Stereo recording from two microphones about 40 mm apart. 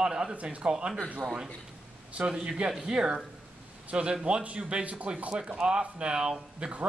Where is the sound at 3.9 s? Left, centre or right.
Right.